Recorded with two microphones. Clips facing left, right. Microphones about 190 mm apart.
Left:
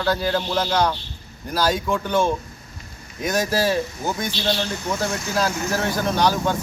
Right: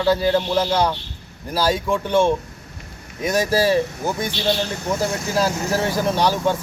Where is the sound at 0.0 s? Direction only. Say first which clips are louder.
Right 4 dB; 5° right (ahead or behind).